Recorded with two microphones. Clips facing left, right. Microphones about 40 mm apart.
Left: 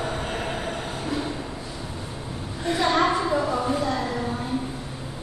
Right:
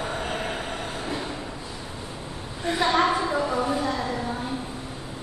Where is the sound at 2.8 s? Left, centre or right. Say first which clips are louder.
Even; centre.